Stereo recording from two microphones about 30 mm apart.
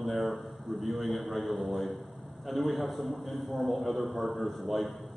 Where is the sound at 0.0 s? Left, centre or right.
Centre.